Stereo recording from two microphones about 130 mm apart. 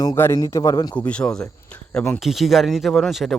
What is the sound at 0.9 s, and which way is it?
Speech, 10° left (ahead or behind).